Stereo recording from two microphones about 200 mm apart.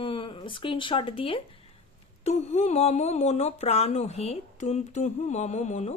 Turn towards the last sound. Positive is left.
turn(degrees=35)  # may be behind; listen again after turning